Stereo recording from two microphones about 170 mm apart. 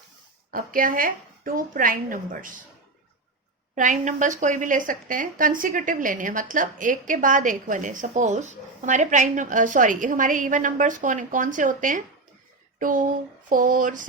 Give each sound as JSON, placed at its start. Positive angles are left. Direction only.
{"t": 0.5, "sound": "a woman's voice", "side_deg": -55}
{"t": 3.8, "sound": "speech", "side_deg": -50}